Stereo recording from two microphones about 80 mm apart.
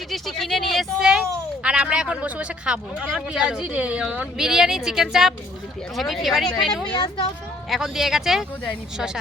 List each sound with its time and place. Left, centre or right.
0.1 s a sound: centre
1.6 s a woman's voice: centre
6.9 s speech: left
7.7 s speech: centre